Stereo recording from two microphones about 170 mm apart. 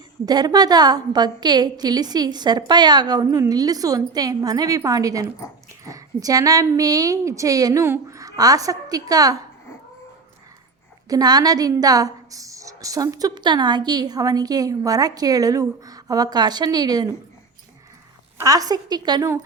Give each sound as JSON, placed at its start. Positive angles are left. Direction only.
{"t": 0.3, "sound": "a woman's voice", "side_deg": -25}
{"t": 11.1, "sound": "a woman's voice", "side_deg": -25}
{"t": 18.3, "sound": "a woman's voice", "side_deg": -20}